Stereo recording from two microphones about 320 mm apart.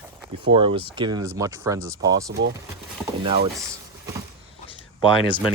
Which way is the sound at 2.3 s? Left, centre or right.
Right.